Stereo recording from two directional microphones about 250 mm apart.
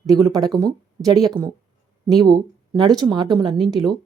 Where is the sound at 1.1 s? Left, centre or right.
Centre.